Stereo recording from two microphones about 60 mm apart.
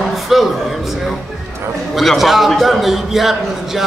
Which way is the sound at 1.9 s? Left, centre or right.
Centre.